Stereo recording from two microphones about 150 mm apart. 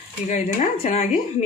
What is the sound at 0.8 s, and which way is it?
Speech, 45° left (ahead or behind).